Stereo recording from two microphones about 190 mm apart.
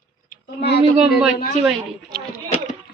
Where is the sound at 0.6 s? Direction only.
60° left (ahead or behind).